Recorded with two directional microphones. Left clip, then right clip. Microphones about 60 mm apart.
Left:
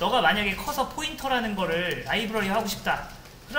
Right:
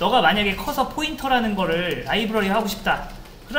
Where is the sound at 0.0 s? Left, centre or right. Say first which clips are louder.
Right 5 dB; right.